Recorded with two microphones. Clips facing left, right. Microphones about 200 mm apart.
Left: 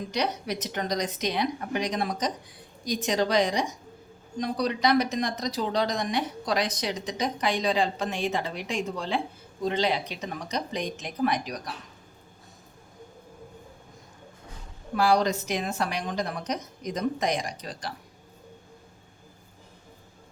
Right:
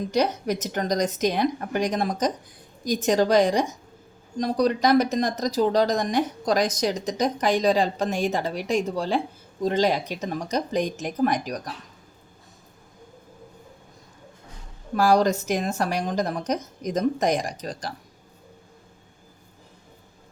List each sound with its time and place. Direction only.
0.1 s speech: 45° right (ahead or behind)
14.9 s speech: 45° right (ahead or behind)